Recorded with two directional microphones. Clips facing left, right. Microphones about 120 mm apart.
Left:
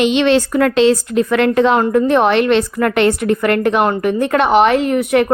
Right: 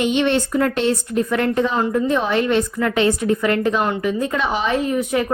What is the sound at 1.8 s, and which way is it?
A woman's voice, 65° left (ahead or behind).